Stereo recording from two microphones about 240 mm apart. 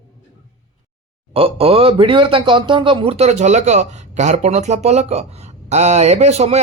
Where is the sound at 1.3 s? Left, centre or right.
Right.